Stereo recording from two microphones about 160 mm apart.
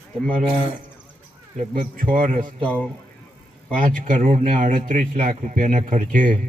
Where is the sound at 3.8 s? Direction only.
50° right (ahead or behind).